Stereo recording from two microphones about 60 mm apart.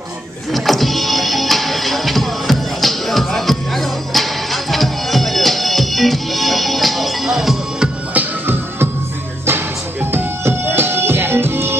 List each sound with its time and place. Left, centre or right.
0.5 s music: centre
8.1 s music: right
10.1 s music: right